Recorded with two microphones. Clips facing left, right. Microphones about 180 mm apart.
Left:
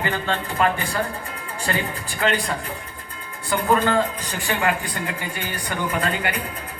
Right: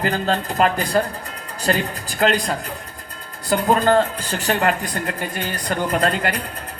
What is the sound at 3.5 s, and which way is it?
Speech, 40° right (ahead or behind).